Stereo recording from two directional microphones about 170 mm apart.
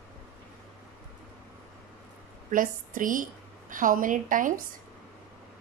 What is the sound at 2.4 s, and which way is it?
A woman's voice, 50° right (ahead or behind).